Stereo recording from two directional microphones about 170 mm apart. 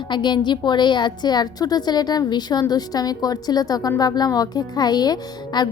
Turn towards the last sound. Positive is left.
turn(degrees=25)  # may be behind; listen again after turning